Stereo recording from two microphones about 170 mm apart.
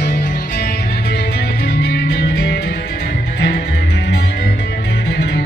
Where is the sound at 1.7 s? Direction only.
85° left.